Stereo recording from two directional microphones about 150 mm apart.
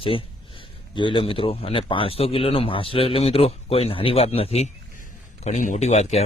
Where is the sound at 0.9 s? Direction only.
35° left (ahead or behind).